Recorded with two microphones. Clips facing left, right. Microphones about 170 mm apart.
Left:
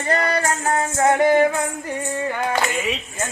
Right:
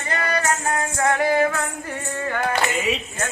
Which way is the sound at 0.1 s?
35° left (ahead or behind).